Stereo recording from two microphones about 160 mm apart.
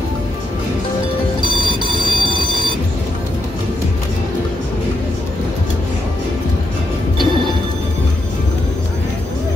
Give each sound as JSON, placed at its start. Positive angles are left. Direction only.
{"t": 1.4, "sound": "train", "side_deg": -30}